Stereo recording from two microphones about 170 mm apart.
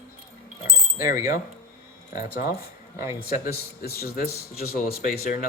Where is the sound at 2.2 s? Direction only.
60° left (ahead or behind).